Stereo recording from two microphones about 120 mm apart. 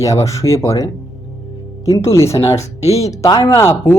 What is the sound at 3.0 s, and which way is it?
Speech, 30° left (ahead or behind).